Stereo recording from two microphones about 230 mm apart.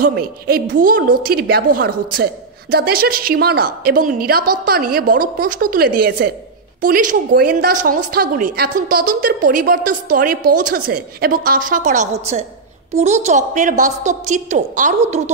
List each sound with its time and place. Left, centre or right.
0.0 s a woman's voice: right